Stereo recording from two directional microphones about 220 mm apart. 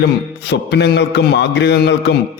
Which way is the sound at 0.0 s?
50° left (ahead or behind).